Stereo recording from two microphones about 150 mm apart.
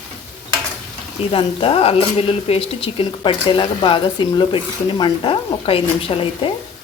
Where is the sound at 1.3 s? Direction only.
35° left (ahead or behind).